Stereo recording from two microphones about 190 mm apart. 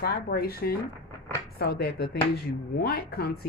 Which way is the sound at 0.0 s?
55° left (ahead or behind).